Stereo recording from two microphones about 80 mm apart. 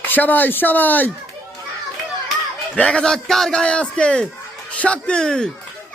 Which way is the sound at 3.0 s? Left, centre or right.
Centre.